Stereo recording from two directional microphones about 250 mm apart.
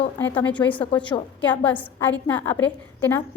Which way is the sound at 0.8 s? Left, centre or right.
Centre.